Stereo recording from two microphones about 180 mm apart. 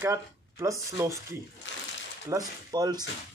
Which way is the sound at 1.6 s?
90° left.